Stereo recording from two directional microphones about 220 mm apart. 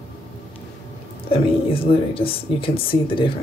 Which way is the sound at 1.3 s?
25° left (ahead or behind).